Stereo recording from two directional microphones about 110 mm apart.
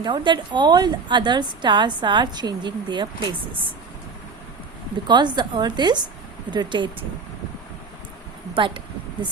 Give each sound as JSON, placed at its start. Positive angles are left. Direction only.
{"t": 0.0, "sound": "a woman's voice", "side_deg": -45}
{"t": 5.0, "sound": "a woman's voice", "side_deg": -40}
{"t": 8.5, "sound": "speech", "side_deg": -50}